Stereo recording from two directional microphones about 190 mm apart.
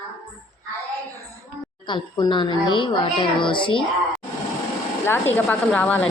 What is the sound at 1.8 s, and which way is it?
A child's voice, 25° left (ahead or behind).